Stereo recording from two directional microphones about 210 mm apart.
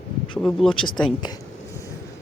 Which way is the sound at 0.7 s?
20° left (ahead or behind).